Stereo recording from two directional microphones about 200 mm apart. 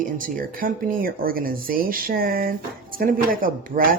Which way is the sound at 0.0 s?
45° right (ahead or behind).